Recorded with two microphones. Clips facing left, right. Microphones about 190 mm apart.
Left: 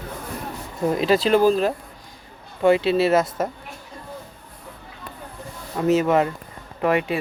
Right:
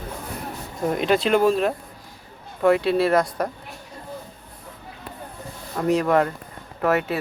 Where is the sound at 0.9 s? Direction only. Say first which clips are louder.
Left 2 dB; centre (ahead or behind).